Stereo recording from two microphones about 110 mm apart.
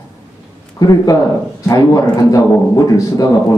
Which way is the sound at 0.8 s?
35° left (ahead or behind).